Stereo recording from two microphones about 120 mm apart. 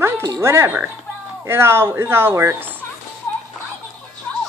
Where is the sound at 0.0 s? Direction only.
25° right (ahead or behind).